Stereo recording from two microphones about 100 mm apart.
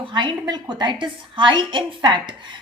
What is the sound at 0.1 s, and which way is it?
A woman's voice, 50° right (ahead or behind).